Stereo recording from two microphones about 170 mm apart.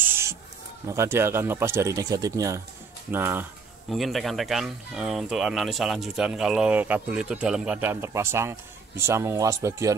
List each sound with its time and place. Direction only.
0.0 s a sound: 15° right (ahead or behind)
0.8 s speech: 15° right (ahead or behind)
3.9 s speech: centre (ahead or behind); by 9.9 s 20° right (ahead or behind)